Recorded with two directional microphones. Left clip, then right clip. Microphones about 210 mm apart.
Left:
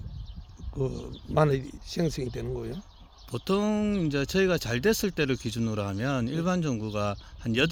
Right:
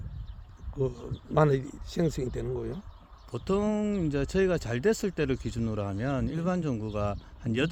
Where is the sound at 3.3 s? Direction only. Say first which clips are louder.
Left 1 dB; 45° left (ahead or behind).